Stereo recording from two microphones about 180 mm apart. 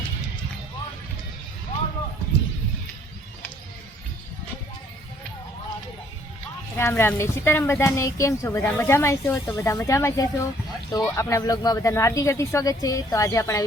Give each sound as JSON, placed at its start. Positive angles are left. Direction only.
{"t": 6.7, "sound": "speech", "side_deg": 15}